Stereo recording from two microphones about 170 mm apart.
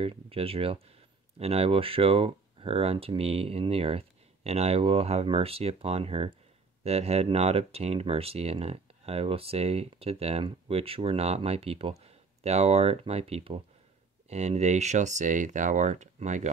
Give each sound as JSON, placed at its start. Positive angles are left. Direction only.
{"t": 0.0, "sound": "speech", "side_deg": -35}